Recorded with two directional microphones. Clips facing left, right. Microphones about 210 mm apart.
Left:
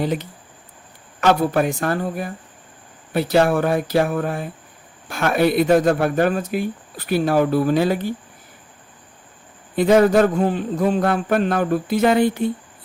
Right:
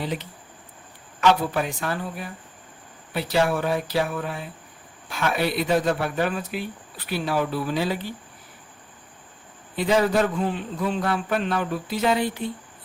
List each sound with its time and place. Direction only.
0.0 s speech: 45° left (ahead or behind)
9.7 s speech: 50° left (ahead or behind)